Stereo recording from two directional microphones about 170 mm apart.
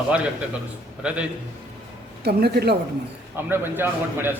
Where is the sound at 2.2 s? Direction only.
70° right (ahead or behind).